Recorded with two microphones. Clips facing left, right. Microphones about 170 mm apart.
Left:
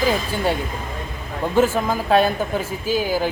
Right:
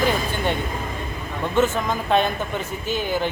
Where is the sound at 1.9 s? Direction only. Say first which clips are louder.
Left 3 dB; 5° left (ahead or behind).